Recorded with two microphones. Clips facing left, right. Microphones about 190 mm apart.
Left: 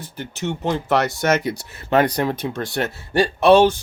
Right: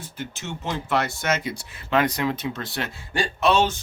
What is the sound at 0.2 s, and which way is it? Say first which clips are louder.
Speech: left 8 dB; 65° left (ahead or behind).